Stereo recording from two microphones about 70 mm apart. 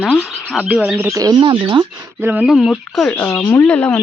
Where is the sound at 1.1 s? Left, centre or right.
Right.